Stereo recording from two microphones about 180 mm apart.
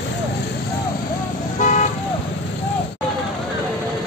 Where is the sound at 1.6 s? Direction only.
45° left (ahead or behind).